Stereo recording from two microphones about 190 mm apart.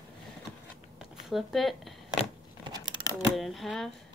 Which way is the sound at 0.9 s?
Centre (ahead or behind).